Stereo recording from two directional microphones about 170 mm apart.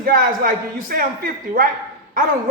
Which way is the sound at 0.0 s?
60° right (ahead or behind).